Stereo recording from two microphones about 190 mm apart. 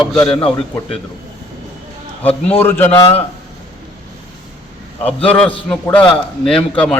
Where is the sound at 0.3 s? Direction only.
30° left (ahead or behind).